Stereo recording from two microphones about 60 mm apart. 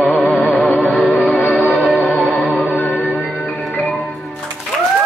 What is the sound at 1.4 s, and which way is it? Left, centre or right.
Music, left.